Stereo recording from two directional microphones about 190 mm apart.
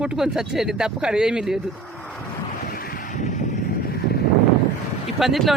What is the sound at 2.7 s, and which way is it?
Vehicle, 50° left (ahead or behind).